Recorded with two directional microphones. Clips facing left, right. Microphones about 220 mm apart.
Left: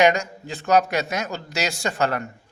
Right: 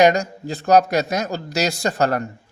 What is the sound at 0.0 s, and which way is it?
Speech, 35° right (ahead or behind).